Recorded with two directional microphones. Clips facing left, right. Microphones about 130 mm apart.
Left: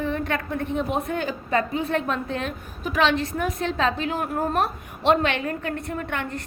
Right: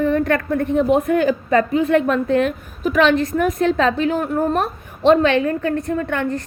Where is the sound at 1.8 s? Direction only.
30° left (ahead or behind).